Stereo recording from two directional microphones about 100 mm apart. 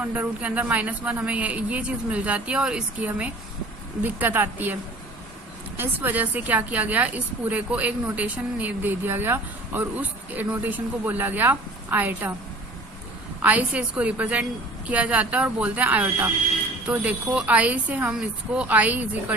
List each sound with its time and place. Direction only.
0.0 s speech: 15° right (ahead or behind)
13.4 s speech: 15° right (ahead or behind)